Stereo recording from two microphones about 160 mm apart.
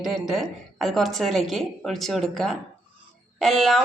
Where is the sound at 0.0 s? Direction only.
Centre (ahead or behind).